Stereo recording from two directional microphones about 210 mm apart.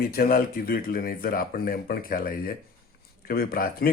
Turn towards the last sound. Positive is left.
turn(degrees=45)  # may be behind; listen again after turning